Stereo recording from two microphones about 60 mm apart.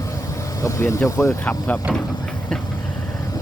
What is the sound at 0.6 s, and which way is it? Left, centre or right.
Speech, left.